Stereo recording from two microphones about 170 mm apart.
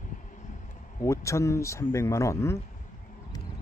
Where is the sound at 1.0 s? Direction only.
15° left (ahead or behind).